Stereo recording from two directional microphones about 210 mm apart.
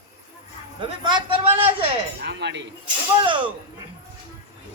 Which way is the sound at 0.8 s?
25° right (ahead or behind).